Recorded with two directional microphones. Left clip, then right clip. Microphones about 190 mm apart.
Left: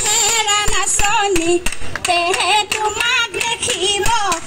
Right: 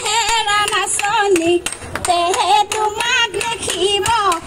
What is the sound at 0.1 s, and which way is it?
Music, 35° left (ahead or behind).